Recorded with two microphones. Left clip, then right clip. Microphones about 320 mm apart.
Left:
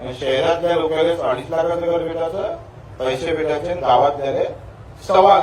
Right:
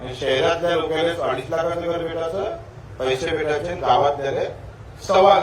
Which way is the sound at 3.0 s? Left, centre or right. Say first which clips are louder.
Left 2 dB; centre.